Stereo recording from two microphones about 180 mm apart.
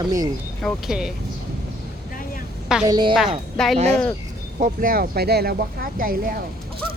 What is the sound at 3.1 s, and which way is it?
Speech, centre (ahead or behind).